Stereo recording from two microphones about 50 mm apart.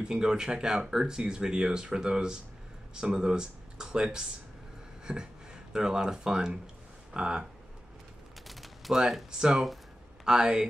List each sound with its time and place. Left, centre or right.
0.0 s speech: centre
8.5 s gunshot: centre
8.9 s speech: centre